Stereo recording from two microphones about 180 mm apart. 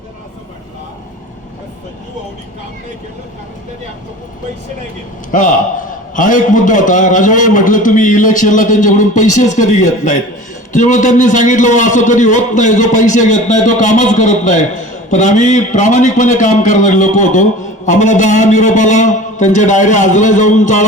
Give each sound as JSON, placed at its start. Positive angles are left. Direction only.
{"t": 5.3, "sound": "a man's voice", "side_deg": 45}